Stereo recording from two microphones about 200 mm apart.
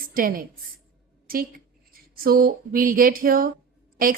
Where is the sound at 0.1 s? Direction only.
45° right (ahead or behind).